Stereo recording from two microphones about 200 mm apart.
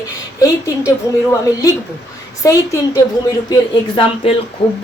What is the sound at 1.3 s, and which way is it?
Speech, 15° left (ahead or behind).